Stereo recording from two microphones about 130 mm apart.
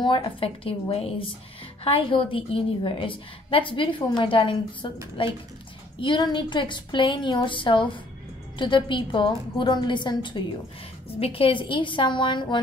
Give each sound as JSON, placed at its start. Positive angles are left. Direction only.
{"t": 0.0, "sound": "a woman's voice", "side_deg": 40}
{"t": 11.1, "sound": "a woman's voice", "side_deg": 50}